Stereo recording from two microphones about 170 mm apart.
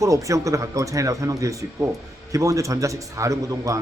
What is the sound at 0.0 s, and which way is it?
A man's voice, 20° right (ahead or behind).